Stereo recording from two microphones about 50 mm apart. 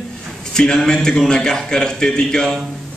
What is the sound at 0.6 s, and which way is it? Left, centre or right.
A man's voice, centre.